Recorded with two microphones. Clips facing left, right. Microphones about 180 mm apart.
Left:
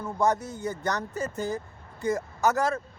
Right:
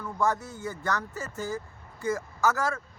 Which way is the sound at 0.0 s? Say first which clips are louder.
Left 3 dB; 20° left (ahead or behind).